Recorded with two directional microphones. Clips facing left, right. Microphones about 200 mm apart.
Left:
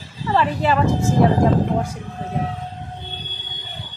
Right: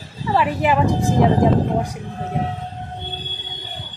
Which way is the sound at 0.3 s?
10° right (ahead or behind).